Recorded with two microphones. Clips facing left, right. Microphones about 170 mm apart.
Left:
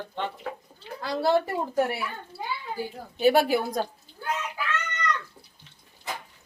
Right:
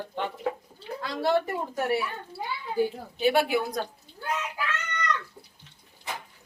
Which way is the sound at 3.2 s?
40° left (ahead or behind).